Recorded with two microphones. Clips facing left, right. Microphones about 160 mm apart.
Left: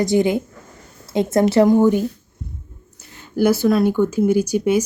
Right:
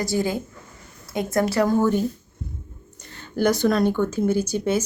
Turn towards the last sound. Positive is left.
turn(degrees=10)  # may be behind; listen again after turning